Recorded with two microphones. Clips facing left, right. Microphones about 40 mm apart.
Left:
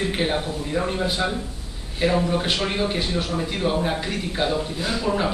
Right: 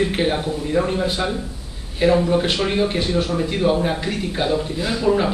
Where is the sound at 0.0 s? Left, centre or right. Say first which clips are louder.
Right 4 dB; centre.